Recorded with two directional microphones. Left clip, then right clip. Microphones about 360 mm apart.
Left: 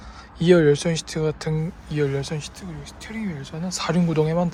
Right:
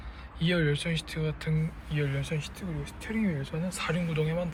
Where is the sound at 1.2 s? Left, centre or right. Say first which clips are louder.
Left 9 dB; centre.